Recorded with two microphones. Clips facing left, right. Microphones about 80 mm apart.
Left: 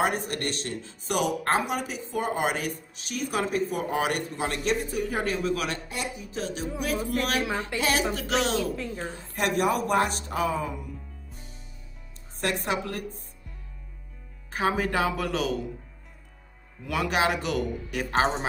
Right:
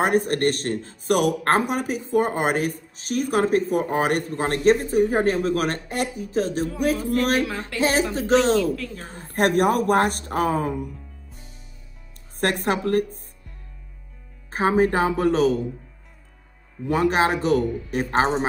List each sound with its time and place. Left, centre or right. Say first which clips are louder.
0.0 s speech: right 7 dB; right
7.7 s speech: right 9 dB; left
8.1 s speech: right 8 dB; right
8.7 s speech: right 1 dB; left
9.1 s speech: right 8 dB; right
12.4 s speech: right 5 dB; right
14.5 s speech: right 6 dB; right
16.8 s speech: right 5 dB; right